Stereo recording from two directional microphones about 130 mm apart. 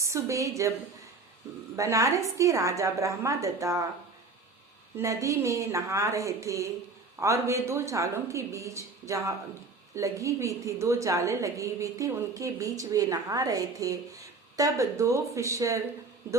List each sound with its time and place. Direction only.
0.0 s a woman's voice: 25° right (ahead or behind)
1.7 s a woman's voice: 25° right (ahead or behind)
4.9 s a woman's voice: 25° right (ahead or behind)